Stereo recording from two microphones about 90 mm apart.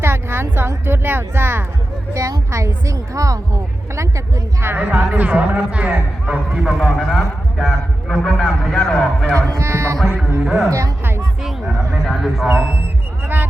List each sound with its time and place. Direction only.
0.0 s a woman's voice: 25° right (ahead or behind)
2.1 s a woman's voice: 35° right (ahead or behind)
4.6 s a man's voice: 20° right (ahead or behind); by 9.0 s 5° left (ahead or behind)
9.5 s a woman's voice: 30° right (ahead or behind)
10.4 s a man's voice: 5° right (ahead or behind)
10.7 s a woman's voice: 35° right (ahead or behind)
12.0 s a man's voice: 5° right (ahead or behind)
13.2 s music: 20° right (ahead or behind)